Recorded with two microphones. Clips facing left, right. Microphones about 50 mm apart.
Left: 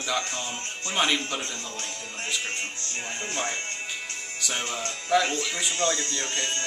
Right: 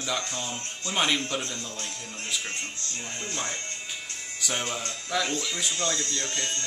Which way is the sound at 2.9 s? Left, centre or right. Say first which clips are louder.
Left 3 dB; left.